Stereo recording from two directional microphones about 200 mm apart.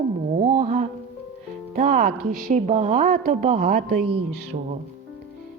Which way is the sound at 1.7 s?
45° right (ahead or behind).